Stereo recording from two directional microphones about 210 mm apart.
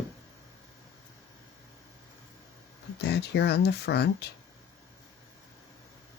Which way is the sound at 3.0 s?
55° left (ahead or behind).